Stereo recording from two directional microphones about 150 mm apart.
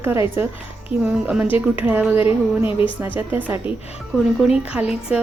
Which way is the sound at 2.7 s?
35° left (ahead or behind).